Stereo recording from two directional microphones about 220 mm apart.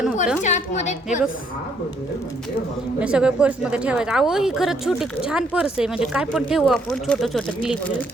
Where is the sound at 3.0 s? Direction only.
5° right (ahead or behind).